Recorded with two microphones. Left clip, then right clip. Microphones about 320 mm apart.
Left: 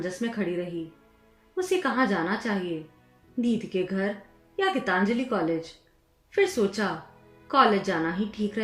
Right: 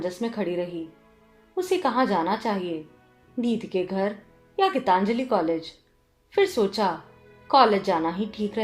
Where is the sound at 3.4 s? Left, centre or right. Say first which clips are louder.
Right 1 dB; centre.